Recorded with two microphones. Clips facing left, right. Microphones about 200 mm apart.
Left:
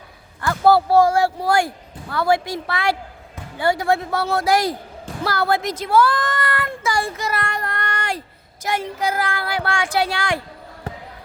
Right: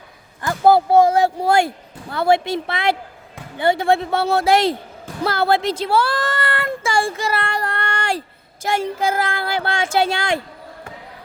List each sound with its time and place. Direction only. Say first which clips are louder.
0.4 s a woman's voice: right 1 dB; 20° right (ahead or behind)